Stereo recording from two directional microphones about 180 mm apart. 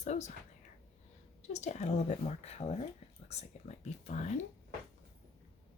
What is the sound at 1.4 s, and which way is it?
Speech, 40° left (ahead or behind).